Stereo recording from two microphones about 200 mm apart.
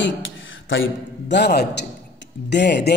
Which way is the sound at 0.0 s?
70° left (ahead or behind).